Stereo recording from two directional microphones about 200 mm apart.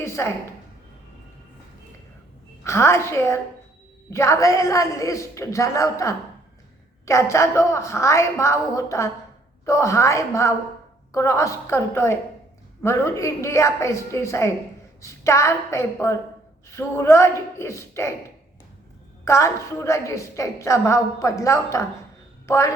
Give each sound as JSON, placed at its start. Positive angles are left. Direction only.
{"t": 0.0, "sound": "a sound", "side_deg": 15}
{"t": 2.6, "sound": "a woman's voice", "side_deg": 15}
{"t": 19.2, "sound": "a woman's voice", "side_deg": 15}